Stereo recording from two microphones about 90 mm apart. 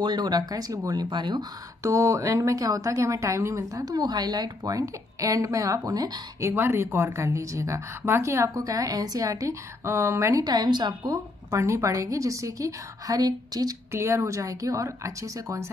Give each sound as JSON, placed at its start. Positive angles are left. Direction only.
{"t": 0.0, "sound": "a woman's voice", "side_deg": -50}
{"t": 1.8, "sound": "speech", "side_deg": -35}
{"t": 3.8, "sound": "a woman's voice", "side_deg": -50}
{"t": 6.4, "sound": "speech", "side_deg": -25}
{"t": 10.4, "sound": "a woman's voice", "side_deg": -50}
{"t": 11.1, "sound": "speech", "side_deg": -35}
{"t": 13.9, "sound": "speech", "side_deg": -35}